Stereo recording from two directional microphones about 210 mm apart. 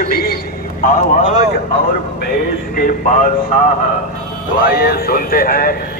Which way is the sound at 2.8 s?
40° left (ahead or behind).